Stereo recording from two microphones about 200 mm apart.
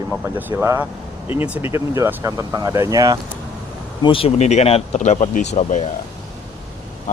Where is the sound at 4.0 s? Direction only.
25° left (ahead or behind).